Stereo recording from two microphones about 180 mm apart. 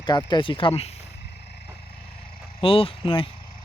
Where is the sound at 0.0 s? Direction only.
25° left (ahead or behind).